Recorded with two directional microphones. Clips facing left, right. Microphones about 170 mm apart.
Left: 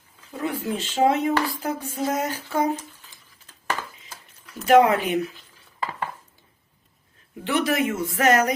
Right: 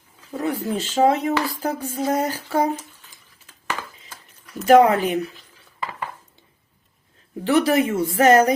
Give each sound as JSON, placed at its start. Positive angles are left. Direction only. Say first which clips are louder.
{"t": 0.3, "sound": "speech", "louder": "right 3 dB", "side_deg": -40}
{"t": 4.6, "sound": "speech", "louder": "right 3 dB", "side_deg": -40}
{"t": 7.4, "sound": "speech", "louder": "right 5 dB", "side_deg": -35}